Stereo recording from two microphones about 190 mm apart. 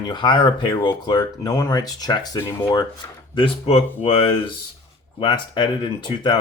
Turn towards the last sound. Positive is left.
turn(degrees=25)  # may be behind; listen again after turning